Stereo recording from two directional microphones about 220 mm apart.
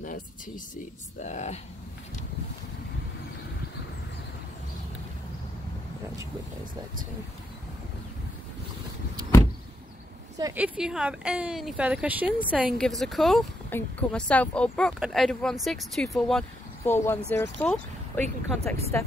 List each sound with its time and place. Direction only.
1.2 s speech: 30° left (ahead or behind)
10.3 s speech: 15° right (ahead or behind)
10.6 s a woman's voice: 5° right (ahead or behind)